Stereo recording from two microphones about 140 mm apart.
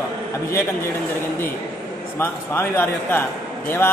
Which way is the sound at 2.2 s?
15° left (ahead or behind).